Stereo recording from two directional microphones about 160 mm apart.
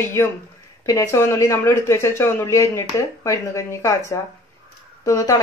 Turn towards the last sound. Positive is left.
turn(degrees=20)  # may be behind; listen again after turning